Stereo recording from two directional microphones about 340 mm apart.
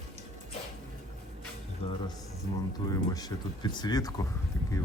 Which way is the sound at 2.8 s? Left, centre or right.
Centre.